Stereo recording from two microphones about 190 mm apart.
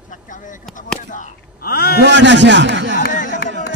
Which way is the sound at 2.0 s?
70° right (ahead or behind).